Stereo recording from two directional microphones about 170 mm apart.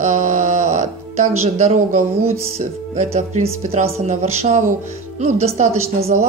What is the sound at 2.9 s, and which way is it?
A woman's voice, 40° right (ahead or behind).